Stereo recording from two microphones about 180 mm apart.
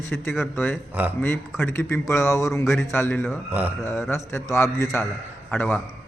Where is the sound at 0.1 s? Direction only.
15° left (ahead or behind).